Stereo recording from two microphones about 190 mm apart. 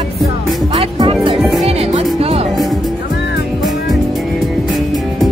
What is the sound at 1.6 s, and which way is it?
Music, 35° right (ahead or behind).